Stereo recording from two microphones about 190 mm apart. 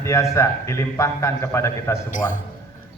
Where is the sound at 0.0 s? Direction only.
15° left (ahead or behind).